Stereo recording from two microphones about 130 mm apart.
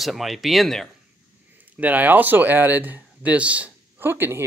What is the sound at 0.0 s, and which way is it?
Speech, centre (ahead or behind).